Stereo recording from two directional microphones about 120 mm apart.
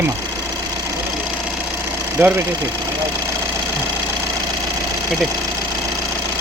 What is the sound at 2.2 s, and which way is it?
Speech, 20° right (ahead or behind).